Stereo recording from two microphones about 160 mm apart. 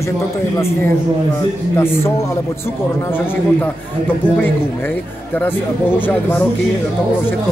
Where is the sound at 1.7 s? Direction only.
15° left (ahead or behind).